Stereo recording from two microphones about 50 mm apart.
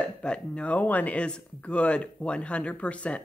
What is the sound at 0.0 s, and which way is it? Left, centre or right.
Speech, left.